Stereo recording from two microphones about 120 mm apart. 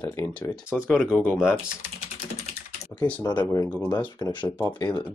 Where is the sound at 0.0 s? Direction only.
25° left (ahead or behind).